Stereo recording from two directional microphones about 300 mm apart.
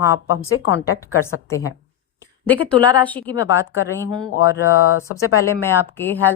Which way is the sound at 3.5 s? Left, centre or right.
Centre.